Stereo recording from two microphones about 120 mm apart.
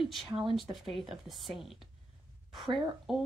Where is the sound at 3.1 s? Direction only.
Centre (ahead or behind).